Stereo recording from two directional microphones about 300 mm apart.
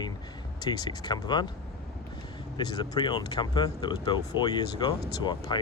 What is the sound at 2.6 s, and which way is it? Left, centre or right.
Speech, centre.